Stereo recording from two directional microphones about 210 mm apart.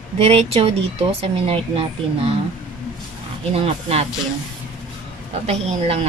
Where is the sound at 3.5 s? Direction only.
30° right (ahead or behind).